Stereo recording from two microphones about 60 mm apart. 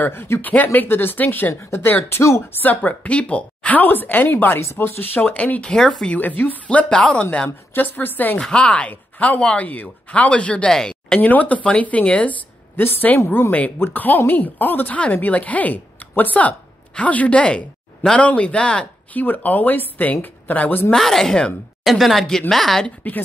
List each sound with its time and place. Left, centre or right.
0.0 s speech: left
1.5 s speech: left
2.6 s speech: left
5.2 s speech: left
5.8 s speech: centre
6.0 s speech: left
7.4 s speech: left
8.4 s speech: centre
11.1 s speech: left
19.1 s speech: left
20.9 s speech: centre
22.8 s speech: left